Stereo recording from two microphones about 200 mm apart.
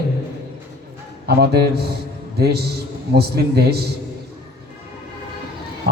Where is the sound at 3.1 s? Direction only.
55° right (ahead or behind).